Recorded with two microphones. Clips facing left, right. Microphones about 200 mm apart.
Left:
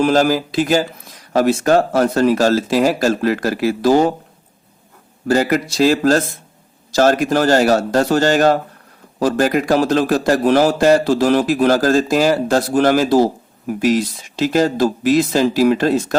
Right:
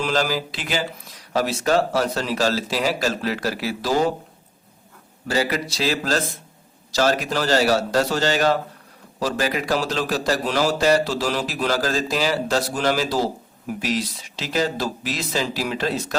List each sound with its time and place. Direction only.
0.0 s a man's voice: 50° left (ahead or behind)
5.3 s a man's voice: 50° left (ahead or behind)